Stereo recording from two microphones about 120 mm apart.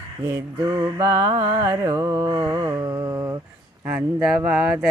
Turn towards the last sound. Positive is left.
turn(degrees=-10)  # may be behind; listen again after turning